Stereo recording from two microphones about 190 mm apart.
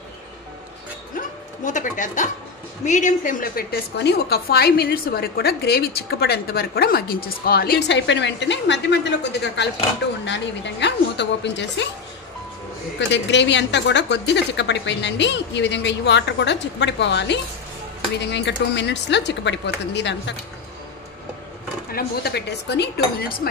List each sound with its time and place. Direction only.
1.1 s a woman's voice: 40° left (ahead or behind); by 11.9 s 65° left (ahead or behind)
13.0 s a woman's voice: 70° left (ahead or behind)
21.9 s a woman's voice: 60° left (ahead or behind)